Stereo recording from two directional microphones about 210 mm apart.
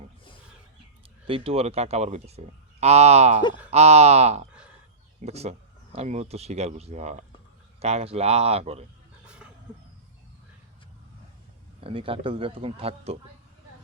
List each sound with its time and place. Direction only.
1.3 s speech: 30° right (ahead or behind)
9.2 s a sound: 5° right (ahead or behind)
11.8 s speech: 25° right (ahead or behind)